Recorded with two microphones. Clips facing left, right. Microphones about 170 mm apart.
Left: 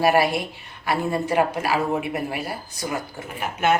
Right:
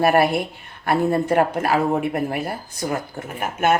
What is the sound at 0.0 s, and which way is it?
Speech, 50° right (ahead or behind).